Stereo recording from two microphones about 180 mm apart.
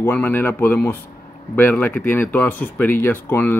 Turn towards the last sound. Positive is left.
turn(degrees=10)  # may be behind; listen again after turning